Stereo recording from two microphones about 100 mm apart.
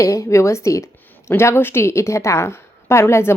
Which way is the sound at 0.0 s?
30° left (ahead or behind).